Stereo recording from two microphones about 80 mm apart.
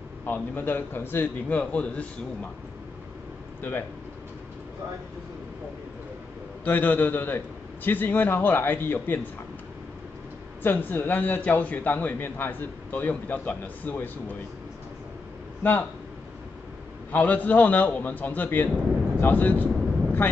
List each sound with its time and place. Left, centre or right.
0.2 s a man's voice: left
6.6 s a man's voice: left
10.6 s a man's voice: left
17.1 s a man's voice: centre
19.1 s vehicle: left